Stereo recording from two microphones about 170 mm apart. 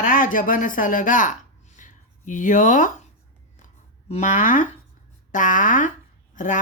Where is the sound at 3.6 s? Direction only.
40° left (ahead or behind).